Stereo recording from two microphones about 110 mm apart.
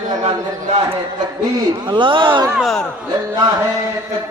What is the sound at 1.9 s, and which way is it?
Speech, 50° right (ahead or behind).